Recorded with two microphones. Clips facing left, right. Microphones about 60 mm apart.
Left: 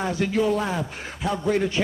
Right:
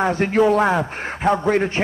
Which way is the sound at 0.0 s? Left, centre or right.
Right.